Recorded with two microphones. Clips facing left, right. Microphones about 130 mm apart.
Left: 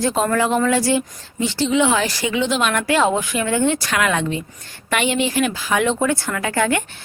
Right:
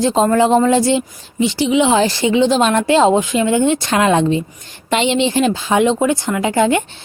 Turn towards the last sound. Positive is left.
turn(degrees=-20)  # may be behind; listen again after turning